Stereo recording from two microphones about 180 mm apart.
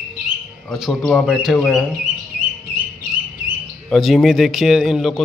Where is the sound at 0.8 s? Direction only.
Centre (ahead or behind).